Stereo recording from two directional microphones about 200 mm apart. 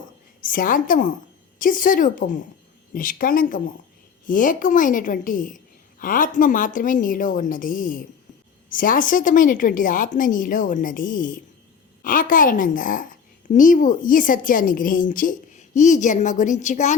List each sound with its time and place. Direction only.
0.4 s a woman's voice: 45° left (ahead or behind)